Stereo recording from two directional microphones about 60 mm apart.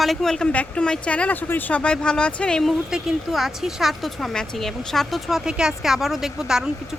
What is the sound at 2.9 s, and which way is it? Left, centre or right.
A woman's voice, centre.